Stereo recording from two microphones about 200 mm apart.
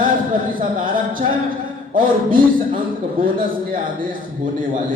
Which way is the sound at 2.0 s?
25° right (ahead or behind).